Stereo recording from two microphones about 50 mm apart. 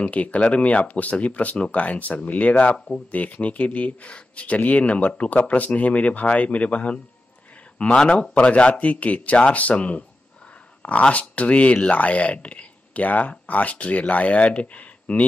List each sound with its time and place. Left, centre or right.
0.0 s speech: left